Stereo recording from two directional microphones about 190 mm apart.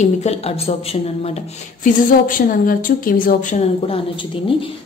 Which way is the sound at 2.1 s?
45° left (ahead or behind).